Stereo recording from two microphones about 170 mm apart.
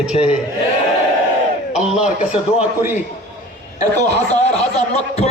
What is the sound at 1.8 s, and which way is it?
Speech, 5° right (ahead or behind).